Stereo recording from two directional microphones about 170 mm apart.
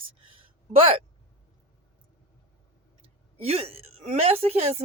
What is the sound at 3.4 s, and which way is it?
A woman's voice, 35° right (ahead or behind).